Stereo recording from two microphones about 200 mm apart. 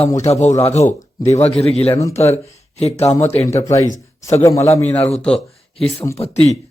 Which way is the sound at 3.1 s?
10° left (ahead or behind).